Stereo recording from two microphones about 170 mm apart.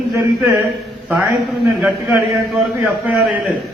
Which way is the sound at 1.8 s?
5° right (ahead or behind).